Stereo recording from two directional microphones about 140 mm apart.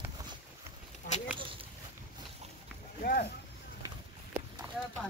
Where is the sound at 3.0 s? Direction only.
90° left.